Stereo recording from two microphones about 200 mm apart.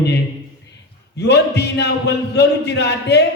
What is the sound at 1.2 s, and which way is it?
A man's voice, 55° left (ahead or behind).